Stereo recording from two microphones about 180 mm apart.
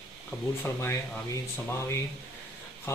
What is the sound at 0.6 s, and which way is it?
Speech, 15° left (ahead or behind).